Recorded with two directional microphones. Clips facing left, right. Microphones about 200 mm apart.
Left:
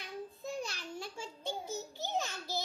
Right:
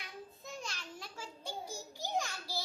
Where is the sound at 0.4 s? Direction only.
30° left (ahead or behind).